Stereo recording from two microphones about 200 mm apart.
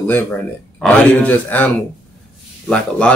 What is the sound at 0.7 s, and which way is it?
Speech, 5° left (ahead or behind).